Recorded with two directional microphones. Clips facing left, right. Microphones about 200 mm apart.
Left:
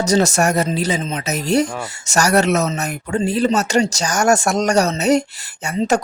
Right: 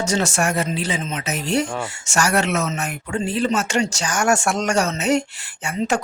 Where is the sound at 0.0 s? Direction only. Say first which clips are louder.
Left 5 dB; 40° left (ahead or behind).